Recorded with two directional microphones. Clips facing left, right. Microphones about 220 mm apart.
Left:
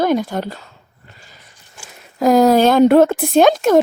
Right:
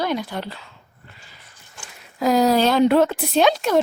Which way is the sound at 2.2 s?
50° left (ahead or behind).